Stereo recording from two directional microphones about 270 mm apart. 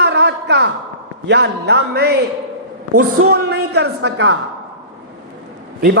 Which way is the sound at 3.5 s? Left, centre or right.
Right.